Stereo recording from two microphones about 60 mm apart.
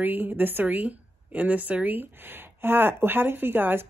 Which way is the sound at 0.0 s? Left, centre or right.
Right.